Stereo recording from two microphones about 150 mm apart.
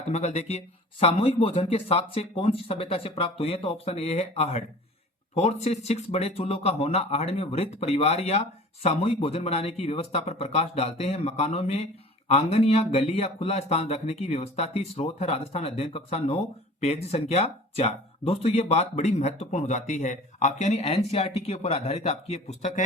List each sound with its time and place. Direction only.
0.1 s speech: 45° left (ahead or behind)